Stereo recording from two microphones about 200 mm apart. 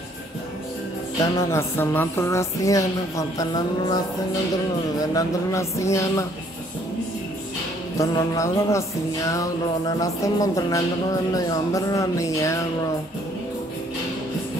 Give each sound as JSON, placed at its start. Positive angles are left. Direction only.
{"t": 1.2, "sound": "music", "side_deg": 15}
{"t": 5.1, "sound": "music", "side_deg": 15}
{"t": 8.0, "sound": "music", "side_deg": 15}